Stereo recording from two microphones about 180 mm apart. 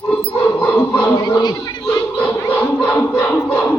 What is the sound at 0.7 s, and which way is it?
Speech, 20° left (ahead or behind).